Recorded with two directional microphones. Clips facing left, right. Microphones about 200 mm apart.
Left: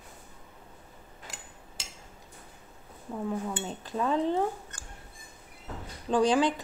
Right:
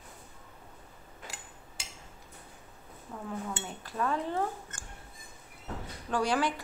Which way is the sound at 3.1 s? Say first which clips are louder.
Left 7 dB; 15° left (ahead or behind).